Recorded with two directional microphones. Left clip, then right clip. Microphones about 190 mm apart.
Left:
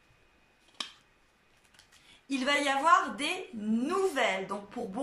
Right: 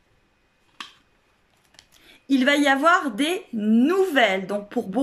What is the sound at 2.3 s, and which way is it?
A woman's voice, 50° right (ahead or behind).